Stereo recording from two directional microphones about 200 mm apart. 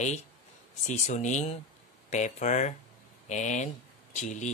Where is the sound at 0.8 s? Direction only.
35° left (ahead or behind).